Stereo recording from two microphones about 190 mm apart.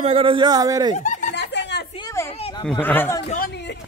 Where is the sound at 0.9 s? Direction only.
40° left (ahead or behind).